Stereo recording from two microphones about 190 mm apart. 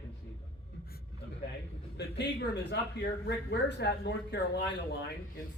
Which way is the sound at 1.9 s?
65° left (ahead or behind).